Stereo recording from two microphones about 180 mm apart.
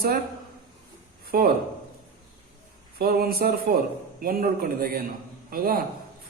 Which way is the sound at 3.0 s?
55° right (ahead or behind).